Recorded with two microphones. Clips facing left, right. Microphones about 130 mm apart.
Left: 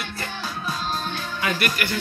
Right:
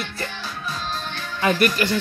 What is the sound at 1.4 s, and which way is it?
Speech, 40° right (ahead or behind).